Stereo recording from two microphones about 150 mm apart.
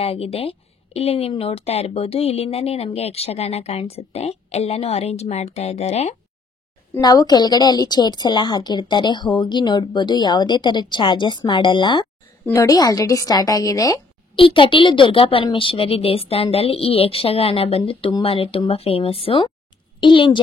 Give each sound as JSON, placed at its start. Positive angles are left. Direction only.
{"t": 0.0, "sound": "a woman's voice", "side_deg": 40}
{"t": 7.0, "sound": "a woman's voice", "side_deg": 25}
{"t": 14.3, "sound": "a woman's voice", "side_deg": 35}